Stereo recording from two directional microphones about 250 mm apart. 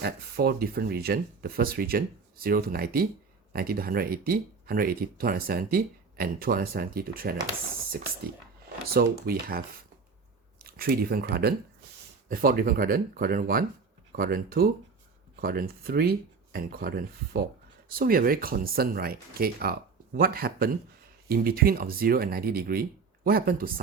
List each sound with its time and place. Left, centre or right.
0.0 s speech: right